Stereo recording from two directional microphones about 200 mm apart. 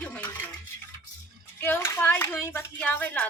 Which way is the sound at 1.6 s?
10° left (ahead or behind).